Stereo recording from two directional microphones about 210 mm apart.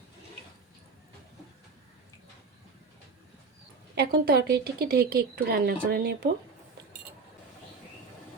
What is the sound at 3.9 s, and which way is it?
A woman's voice, 50° right (ahead or behind).